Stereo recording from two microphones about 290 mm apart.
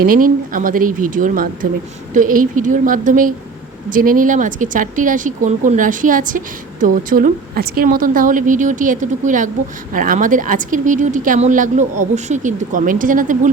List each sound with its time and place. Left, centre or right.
0.0 s speech: right